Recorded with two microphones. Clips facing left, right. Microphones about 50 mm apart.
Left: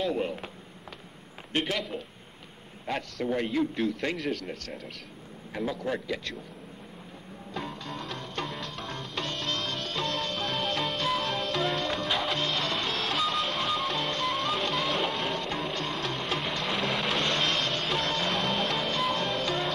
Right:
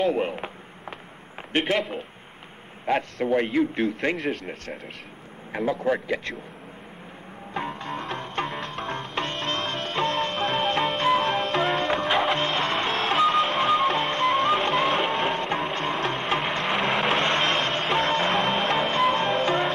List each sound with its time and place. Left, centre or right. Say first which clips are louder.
0.0 s a sound: right 6 dB; right
1.5 s a man's voice: right 6 dB; right
2.9 s a man's voice: right 7 dB; right
7.5 s music: right 6 dB; right
11.2 s music: right 6 dB; right
11.8 s music: right 7 dB; right
13.1 s music: right 10 dB; right
13.9 s music: right 7 dB; right
17.2 s a sound: right 5 dB; right
17.8 s music: right 6 dB; right
18.8 s music: right 7 dB; right